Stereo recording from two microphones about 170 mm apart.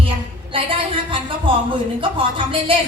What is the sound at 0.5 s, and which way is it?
A woman's voice, 35° right (ahead or behind).